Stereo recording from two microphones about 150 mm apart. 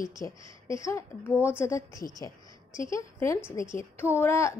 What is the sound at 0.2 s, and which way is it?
A woman's voice, 20° left (ahead or behind).